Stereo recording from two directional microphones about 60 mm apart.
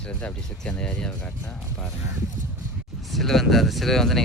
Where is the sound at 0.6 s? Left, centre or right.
Centre.